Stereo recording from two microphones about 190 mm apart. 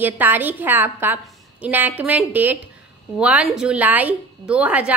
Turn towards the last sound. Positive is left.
turn(degrees=-5)  # may be behind; listen again after turning